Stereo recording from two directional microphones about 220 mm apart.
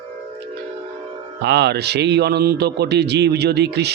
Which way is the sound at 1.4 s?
50° right (ahead or behind).